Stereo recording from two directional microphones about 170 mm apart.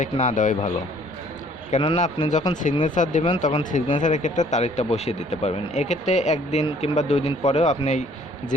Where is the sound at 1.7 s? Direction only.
40° left (ahead or behind).